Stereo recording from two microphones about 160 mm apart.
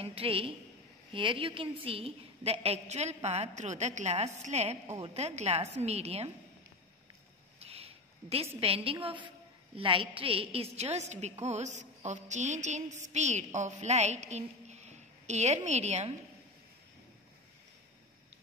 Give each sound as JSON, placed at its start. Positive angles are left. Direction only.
{"t": 0.0, "sound": "a woman's voice", "side_deg": -35}
{"t": 7.6, "sound": "a woman's voice", "side_deg": -40}